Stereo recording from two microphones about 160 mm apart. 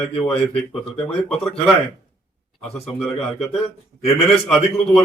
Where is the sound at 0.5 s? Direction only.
5° left (ahead or behind).